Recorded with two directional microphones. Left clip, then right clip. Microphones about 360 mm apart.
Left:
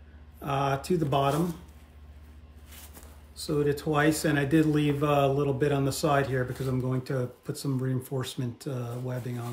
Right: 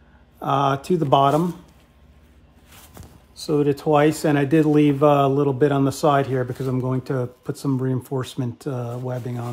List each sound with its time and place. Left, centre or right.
0.4 s speech: centre
3.4 s speech: centre